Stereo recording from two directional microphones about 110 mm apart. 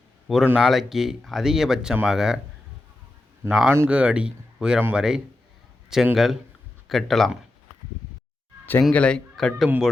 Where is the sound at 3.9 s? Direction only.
10° right (ahead or behind).